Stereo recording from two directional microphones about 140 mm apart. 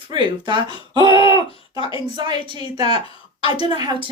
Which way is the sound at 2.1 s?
35° right (ahead or behind).